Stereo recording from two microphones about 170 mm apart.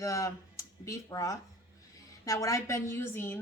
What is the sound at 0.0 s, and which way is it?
A woman's voice, 20° left (ahead or behind).